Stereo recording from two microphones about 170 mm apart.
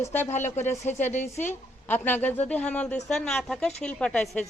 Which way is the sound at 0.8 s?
10° left (ahead or behind).